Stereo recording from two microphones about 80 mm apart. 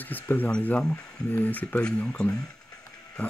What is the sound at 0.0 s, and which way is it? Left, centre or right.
Speech, left.